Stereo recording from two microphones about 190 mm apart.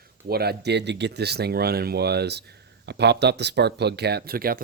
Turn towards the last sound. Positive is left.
turn(degrees=-50)  # may be behind; listen again after turning